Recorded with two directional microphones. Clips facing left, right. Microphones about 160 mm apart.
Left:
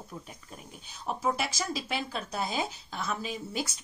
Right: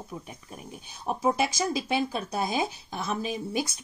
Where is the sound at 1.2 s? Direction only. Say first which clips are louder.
Right 6 dB; 20° right (ahead or behind).